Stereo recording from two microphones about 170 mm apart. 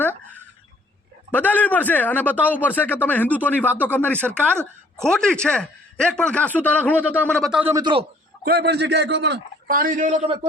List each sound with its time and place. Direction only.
1.3 s speech: 10° left (ahead or behind)
7.6 s a man's voice: 15° right (ahead or behind)
8.4 s speech: 75° right (ahead or behind); by 9.4 s 90° right
9.6 s a man's voice: 55° right (ahead or behind)